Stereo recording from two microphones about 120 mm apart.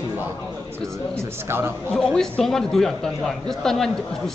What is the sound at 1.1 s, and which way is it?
Speech, 20° right (ahead or behind).